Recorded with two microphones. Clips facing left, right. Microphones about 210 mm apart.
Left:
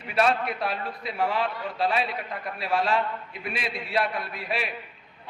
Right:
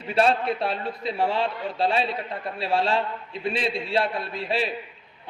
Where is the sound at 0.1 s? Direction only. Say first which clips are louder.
Right 3 dB; 30° right (ahead or behind).